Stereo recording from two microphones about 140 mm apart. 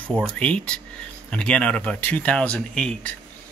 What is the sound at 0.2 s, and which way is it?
Speech, 10° left (ahead or behind).